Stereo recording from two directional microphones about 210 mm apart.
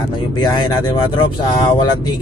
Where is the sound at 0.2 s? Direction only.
20° left (ahead or behind).